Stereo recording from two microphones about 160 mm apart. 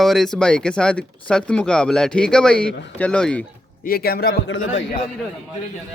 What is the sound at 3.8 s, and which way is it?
Speech, 70° left (ahead or behind).